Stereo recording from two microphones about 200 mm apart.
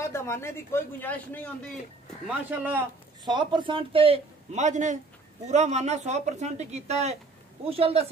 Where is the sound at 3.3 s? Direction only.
20° right (ahead or behind).